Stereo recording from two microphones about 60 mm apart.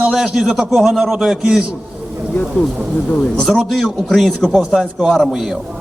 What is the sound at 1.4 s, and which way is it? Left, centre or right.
Speech, centre.